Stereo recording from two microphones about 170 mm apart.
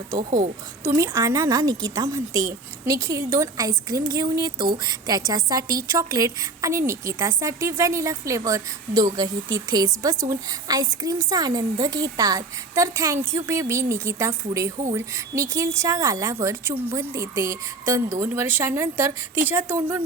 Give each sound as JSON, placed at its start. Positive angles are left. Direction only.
{"t": 0.2, "sound": "a woman's voice", "side_deg": -45}
{"t": 0.9, "sound": "a woman's voice", "side_deg": -15}